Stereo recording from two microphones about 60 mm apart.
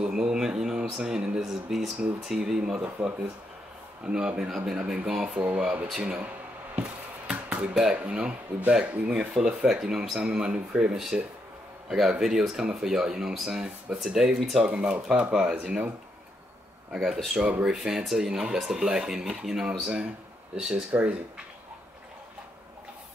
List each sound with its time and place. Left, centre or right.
0.0 s a sound: centre
2.2 s speech: centre
5.4 s speech: right
6.0 s a sound: centre
8.0 s speech: centre
14.6 s speech: centre
16.9 s speech: centre
17.4 s speech: centre
17.7 s speech: centre